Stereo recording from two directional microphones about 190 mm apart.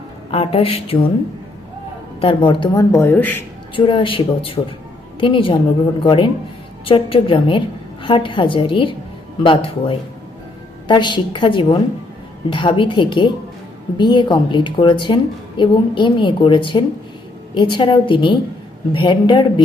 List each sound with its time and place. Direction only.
0.3 s a woman's voice: 30° left (ahead or behind)
2.2 s speech: 25° left (ahead or behind); by 3.4 s 10° left (ahead or behind)
3.8 s a woman's voice: 25° left (ahead or behind)